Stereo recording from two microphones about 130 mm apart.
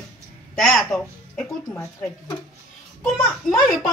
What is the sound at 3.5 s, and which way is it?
Speech, 90° left.